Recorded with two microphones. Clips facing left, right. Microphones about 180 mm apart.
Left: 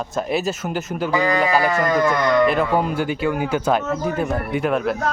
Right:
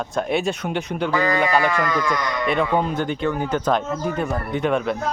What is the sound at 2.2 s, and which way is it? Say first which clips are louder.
Speech: left 9 dB; 55° left (ahead or behind).